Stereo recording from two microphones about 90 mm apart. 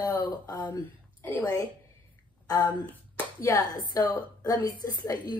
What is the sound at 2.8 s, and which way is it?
Finger snapping, 20° left (ahead or behind).